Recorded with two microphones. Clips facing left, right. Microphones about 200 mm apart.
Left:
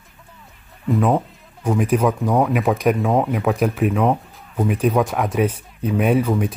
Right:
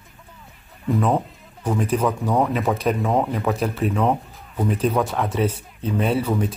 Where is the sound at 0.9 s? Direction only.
Centre (ahead or behind).